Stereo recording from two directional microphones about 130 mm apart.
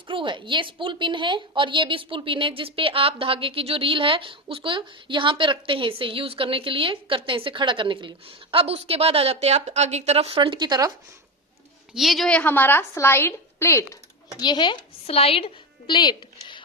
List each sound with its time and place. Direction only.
0.1 s a woman's voice: 40° right (ahead or behind)
11.9 s a woman's voice: centre (ahead or behind); by 13.8 s 20° left (ahead or behind)
14.3 s a woman's voice: 35° left (ahead or behind)